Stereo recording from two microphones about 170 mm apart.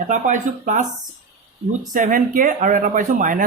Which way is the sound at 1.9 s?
50° right (ahead or behind).